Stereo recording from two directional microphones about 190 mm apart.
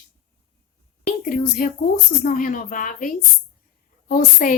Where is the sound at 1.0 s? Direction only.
45° left (ahead or behind).